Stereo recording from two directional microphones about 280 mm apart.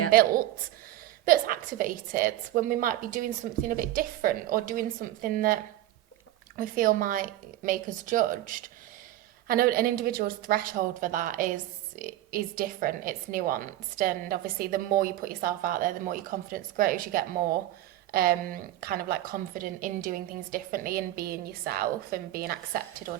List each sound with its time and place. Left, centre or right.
0.1 s a woman's voice: right
6.6 s a woman's voice: right